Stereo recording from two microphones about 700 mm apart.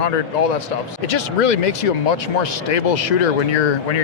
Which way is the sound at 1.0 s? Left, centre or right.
Left.